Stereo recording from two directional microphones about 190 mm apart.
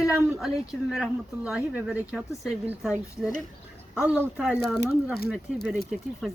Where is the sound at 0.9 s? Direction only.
5° right (ahead or behind).